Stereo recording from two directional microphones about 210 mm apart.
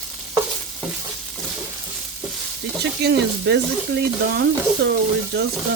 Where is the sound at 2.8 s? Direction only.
50° right (ahead or behind).